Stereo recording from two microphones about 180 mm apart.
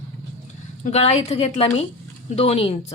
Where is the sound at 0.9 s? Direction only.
35° left (ahead or behind).